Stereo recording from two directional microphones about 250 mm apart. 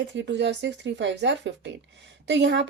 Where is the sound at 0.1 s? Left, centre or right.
Right.